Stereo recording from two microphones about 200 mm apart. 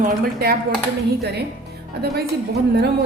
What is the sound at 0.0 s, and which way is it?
Speech, 50° right (ahead or behind).